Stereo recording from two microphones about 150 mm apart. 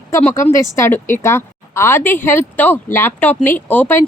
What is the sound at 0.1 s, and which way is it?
A woman's voice, 15° left (ahead or behind).